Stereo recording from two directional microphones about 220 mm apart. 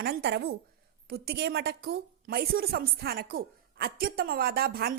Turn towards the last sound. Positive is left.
turn(degrees=-45)  # may be behind; listen again after turning